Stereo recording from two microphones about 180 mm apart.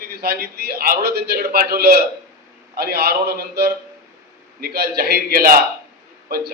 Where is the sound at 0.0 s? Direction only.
60° right (ahead or behind).